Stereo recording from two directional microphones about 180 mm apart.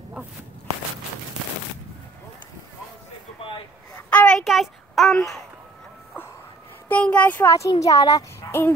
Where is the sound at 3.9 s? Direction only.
10° left (ahead or behind).